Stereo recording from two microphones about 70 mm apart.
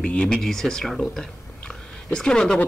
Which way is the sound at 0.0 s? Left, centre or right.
Centre.